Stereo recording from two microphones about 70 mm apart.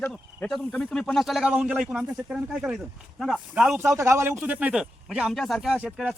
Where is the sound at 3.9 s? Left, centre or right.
Right.